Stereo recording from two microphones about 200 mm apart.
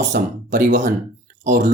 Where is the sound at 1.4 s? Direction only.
40° right (ahead or behind).